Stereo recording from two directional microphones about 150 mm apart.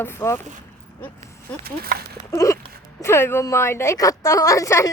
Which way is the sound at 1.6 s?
90° right.